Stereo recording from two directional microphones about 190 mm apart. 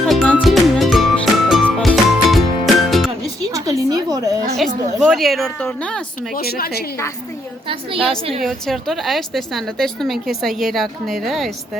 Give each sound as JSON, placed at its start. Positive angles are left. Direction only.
{"t": 0.1, "sound": "music", "side_deg": 5}
{"t": 3.5, "sound": "a sound", "side_deg": -20}
{"t": 4.9, "sound": "a woman's voice", "side_deg": 0}
{"t": 6.3, "sound": "a woman's voice", "side_deg": 50}
{"t": 7.9, "sound": "a woman's voice", "side_deg": 0}